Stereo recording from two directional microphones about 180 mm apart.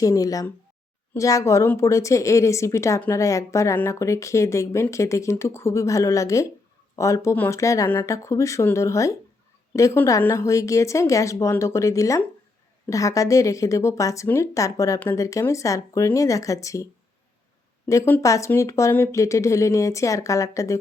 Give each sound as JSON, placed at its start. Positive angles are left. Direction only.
{"t": 0.0, "sound": "a woman's voice", "side_deg": 20}